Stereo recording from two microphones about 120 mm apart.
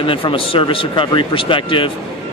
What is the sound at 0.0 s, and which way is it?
Speech, 45° left (ahead or behind).